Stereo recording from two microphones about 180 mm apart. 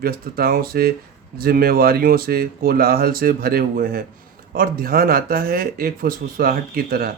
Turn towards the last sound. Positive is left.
turn(degrees=-55)  # may be behind; listen again after turning